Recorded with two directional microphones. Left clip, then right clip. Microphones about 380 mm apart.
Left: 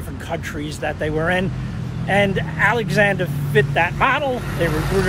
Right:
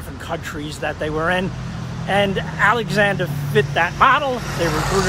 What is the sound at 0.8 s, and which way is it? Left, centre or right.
Speech, centre.